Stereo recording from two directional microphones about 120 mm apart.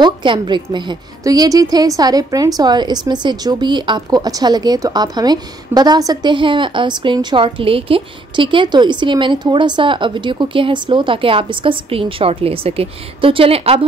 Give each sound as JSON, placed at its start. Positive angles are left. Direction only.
{"t": 0.0, "sound": "a woman's voice", "side_deg": -40}